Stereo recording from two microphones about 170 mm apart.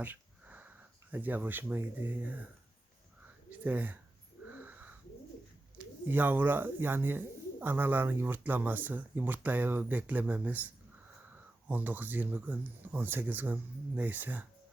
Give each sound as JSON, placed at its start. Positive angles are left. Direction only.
{"t": 0.0, "sound": "sniff", "side_deg": -10}
{"t": 1.1, "sound": "speech", "side_deg": -10}
{"t": 3.5, "sound": "speech", "side_deg": -10}
{"t": 4.4, "sound": "wheeze", "side_deg": -10}
{"t": 5.7, "sound": "speech", "side_deg": -10}
{"t": 11.7, "sound": "speech", "side_deg": -10}